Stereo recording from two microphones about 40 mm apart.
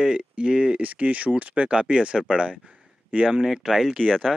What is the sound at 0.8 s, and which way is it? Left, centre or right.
Speech, right.